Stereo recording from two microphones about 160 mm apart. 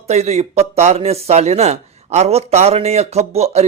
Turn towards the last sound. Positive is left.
turn(degrees=-40)  # may be behind; listen again after turning